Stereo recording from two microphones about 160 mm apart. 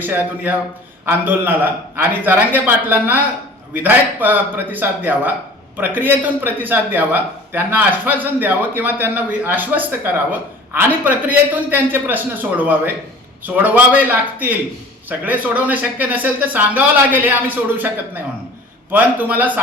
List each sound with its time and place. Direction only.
0.0 s a man's voice: 10° right (ahead or behind)
18.9 s a man's voice: 10° right (ahead or behind)